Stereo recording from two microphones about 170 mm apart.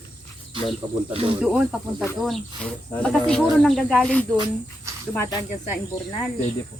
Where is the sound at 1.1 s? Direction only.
35° right (ahead or behind).